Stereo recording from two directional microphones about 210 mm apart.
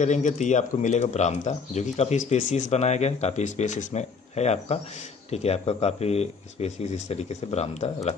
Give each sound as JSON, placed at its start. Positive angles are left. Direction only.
{"t": 0.0, "sound": "speech", "side_deg": 35}